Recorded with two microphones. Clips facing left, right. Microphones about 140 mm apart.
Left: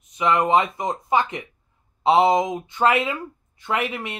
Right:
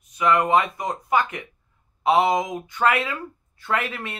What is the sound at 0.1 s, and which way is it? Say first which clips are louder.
Speech: even; 20° left (ahead or behind).